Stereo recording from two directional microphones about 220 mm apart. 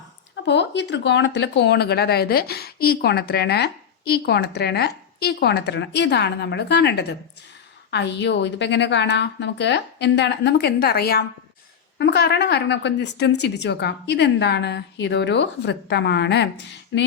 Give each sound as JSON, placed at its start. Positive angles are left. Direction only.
{"t": 0.4, "sound": "speech", "side_deg": 50}